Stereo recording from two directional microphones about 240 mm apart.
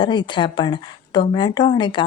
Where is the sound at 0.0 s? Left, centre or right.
Centre.